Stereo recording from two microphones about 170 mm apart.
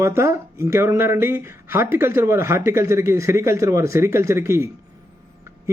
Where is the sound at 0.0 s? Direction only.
15° right (ahead or behind).